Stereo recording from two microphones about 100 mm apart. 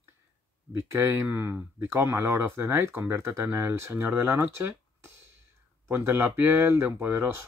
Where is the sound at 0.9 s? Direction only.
25° right (ahead or behind).